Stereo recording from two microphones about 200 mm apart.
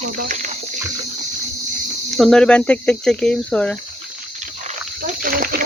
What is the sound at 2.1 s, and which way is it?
Speech, centre (ahead or behind).